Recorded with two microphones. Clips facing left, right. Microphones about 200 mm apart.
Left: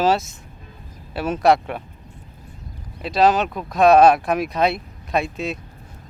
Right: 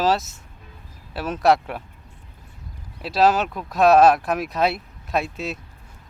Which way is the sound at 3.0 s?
5° right (ahead or behind).